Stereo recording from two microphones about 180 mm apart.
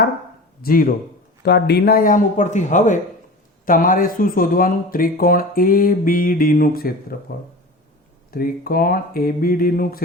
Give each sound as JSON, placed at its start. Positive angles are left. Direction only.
{"t": 0.6, "sound": "speech", "side_deg": 55}
{"t": 1.4, "sound": "speech", "side_deg": 65}
{"t": 8.3, "sound": "speech", "side_deg": 55}